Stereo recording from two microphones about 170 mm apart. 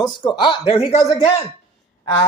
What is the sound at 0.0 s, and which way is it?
Speech, 25° left (ahead or behind).